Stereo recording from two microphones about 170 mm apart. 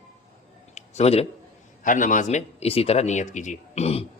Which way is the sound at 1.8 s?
50° left (ahead or behind).